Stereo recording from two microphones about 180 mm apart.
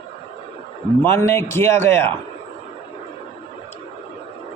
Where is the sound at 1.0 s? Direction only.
15° left (ahead or behind).